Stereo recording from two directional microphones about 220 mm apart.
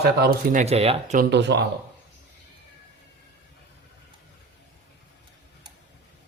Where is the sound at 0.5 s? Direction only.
30° right (ahead or behind).